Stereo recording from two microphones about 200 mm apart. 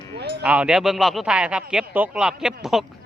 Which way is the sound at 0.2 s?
55° right (ahead or behind).